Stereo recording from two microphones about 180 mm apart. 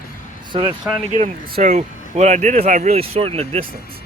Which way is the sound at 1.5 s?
40° right (ahead or behind).